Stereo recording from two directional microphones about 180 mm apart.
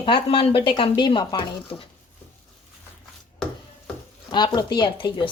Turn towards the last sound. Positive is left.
turn(degrees=25)  # may be behind; listen again after turning